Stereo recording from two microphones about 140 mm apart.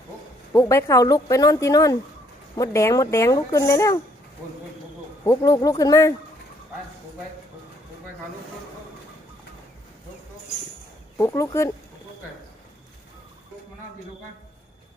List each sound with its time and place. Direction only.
0.5 s a woman's voice: 20° left (ahead or behind)
5.2 s a woman's voice: 20° left (ahead or behind)
11.2 s a woman's voice: 20° left (ahead or behind)